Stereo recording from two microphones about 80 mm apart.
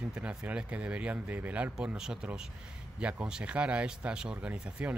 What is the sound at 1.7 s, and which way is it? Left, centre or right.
Speech, centre.